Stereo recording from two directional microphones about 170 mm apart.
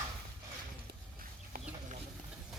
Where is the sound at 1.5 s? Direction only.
45° right (ahead or behind).